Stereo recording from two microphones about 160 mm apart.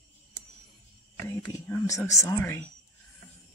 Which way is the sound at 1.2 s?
20° left (ahead or behind).